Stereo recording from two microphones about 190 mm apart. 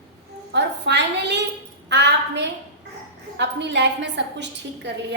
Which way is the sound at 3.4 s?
65° right (ahead or behind).